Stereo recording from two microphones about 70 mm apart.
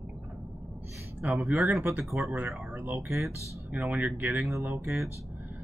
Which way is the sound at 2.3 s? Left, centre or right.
Right.